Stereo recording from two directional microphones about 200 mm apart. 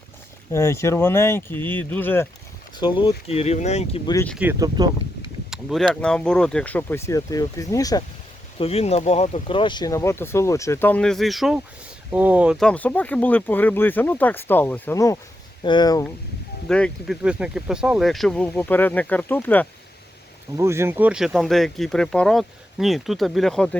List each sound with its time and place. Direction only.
0.5 s speech: 15° left (ahead or behind)
2.7 s speech: 25° left (ahead or behind)
4.0 s speech: 15° left (ahead or behind)
4.8 s speech: 20° right (ahead or behind)
5.5 s speech: centre (ahead or behind); by 8.0 s 20° left (ahead or behind)
8.5 s speech: 30° left (ahead or behind)
16.6 s speech: 5° left (ahead or behind)
20.6 s speech: 15° right (ahead or behind); by 23.7 s 5° left (ahead or behind)